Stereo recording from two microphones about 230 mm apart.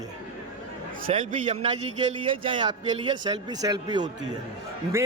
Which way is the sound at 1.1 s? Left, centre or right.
Right.